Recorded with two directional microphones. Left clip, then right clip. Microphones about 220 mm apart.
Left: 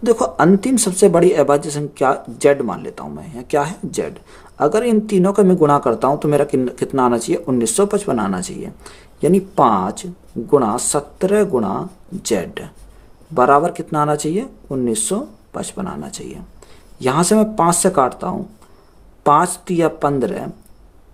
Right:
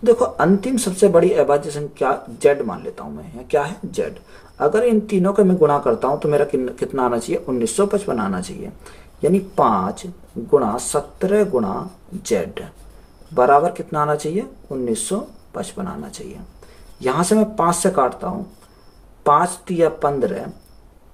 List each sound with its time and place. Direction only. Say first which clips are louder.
0.0 s speech: left 1 dB; 45° left (ahead or behind)